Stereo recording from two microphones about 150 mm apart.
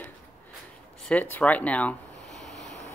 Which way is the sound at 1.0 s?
10° left (ahead or behind).